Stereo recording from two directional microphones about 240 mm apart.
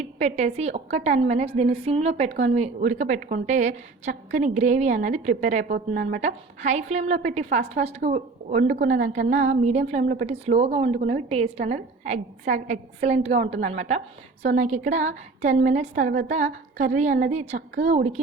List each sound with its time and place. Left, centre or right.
0.2 s a woman's voice: right
10.0 s a woman's voice: right
10.4 s a woman's voice: right